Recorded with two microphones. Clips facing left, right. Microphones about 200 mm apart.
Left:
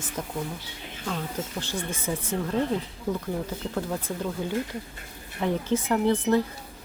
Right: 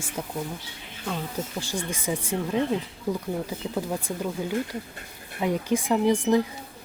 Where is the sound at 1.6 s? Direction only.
15° right (ahead or behind).